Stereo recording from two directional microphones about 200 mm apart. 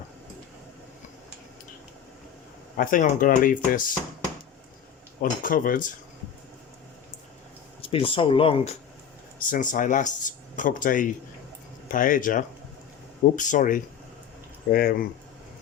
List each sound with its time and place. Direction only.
2.7 s speech: 45° left (ahead or behind)
5.2 s speech: 45° left (ahead or behind)
7.8 s speech: 25° left (ahead or behind)
9.4 s speech: 40° left (ahead or behind)